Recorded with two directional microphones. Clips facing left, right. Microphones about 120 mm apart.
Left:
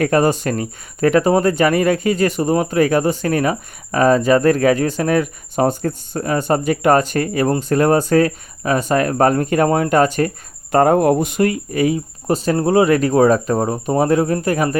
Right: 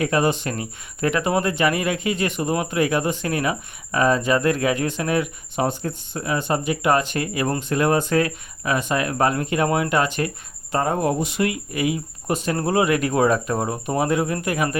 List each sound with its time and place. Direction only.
0.0 s speech: 45° left (ahead or behind)
10.7 s speech: 60° left (ahead or behind); by 14.8 s 40° left (ahead or behind)